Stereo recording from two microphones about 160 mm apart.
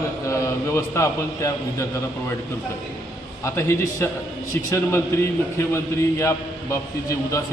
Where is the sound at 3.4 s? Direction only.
15° left (ahead or behind).